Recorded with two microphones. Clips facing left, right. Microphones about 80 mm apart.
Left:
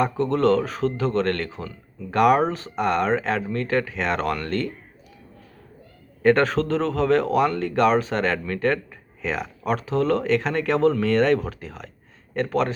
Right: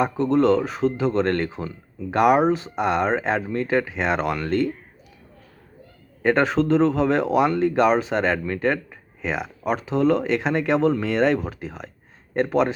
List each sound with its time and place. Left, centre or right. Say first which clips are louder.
0.0 s speech: right 1 dB; centre
6.2 s speech: even; centre